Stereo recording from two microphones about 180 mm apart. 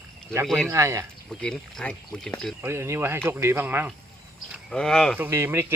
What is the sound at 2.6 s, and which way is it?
Speech, 15° right (ahead or behind).